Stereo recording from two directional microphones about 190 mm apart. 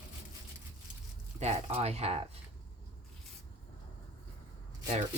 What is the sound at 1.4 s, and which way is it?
Speech, 35° right (ahead or behind).